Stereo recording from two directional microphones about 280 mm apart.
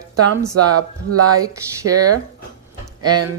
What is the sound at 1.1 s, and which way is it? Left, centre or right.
Speech, right.